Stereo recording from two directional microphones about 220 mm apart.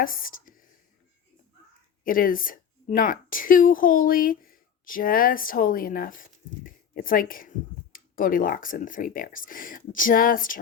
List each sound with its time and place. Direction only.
0.0 s speech: 40° left (ahead or behind)
2.0 s a woman's voice: 40° left (ahead or behind)